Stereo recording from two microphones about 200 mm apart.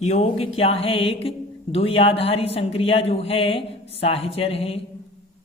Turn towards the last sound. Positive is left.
turn(degrees=30)  # may be behind; listen again after turning